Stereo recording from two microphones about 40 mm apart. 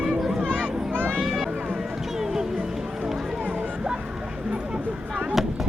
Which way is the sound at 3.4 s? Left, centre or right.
Right.